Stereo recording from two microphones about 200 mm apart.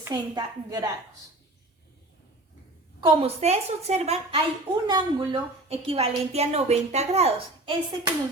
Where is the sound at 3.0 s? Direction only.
25° right (ahead or behind).